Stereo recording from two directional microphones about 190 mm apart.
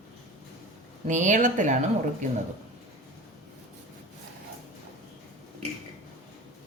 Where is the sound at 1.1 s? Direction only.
40° right (ahead or behind).